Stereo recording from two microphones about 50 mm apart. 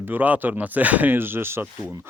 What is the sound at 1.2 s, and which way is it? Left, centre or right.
Speech, right.